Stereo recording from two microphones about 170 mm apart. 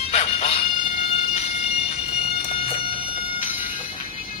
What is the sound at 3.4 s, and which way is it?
Music, 50° left (ahead or behind).